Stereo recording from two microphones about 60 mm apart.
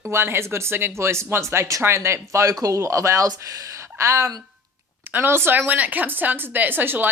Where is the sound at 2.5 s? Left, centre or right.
Right.